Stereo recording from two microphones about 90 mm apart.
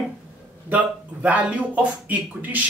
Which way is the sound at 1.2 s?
15° right (ahead or behind).